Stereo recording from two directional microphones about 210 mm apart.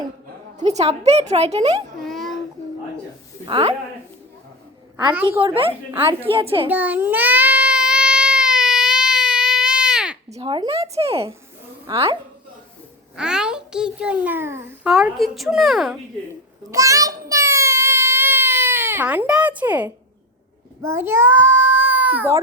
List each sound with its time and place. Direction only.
0.6 s a woman's voice: 30° right (ahead or behind)
2.0 s a sound: centre (ahead or behind)
3.4 s a woman's voice: 25° right (ahead or behind)
5.4 s a woman's voice: 25° right (ahead or behind)
6.7 s baby cry: 10° right (ahead or behind)
10.3 s a woman's voice: 25° right (ahead or behind)
13.1 s a child's voice: 5° right (ahead or behind)
16.7 s a sound: 15° right (ahead or behind)
20.8 s a child's voice: 10° right (ahead or behind)